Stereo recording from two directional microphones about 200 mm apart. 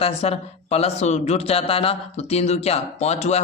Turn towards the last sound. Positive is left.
turn(degrees=35)  # may be behind; listen again after turning